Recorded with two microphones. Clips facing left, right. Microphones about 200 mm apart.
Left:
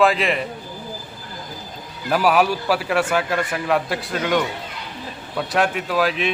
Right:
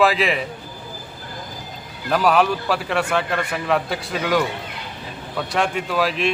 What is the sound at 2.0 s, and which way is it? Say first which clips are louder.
A man's voice: even; 5° left (ahead or behind).